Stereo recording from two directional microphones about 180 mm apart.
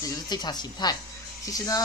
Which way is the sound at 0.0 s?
20° left (ahead or behind).